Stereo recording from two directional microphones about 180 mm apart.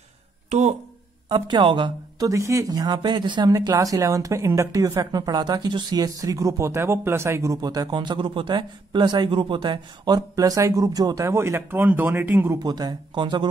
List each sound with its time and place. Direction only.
0.5 s speech: 40° right (ahead or behind)
1.3 s a woman's voice: 25° right (ahead or behind)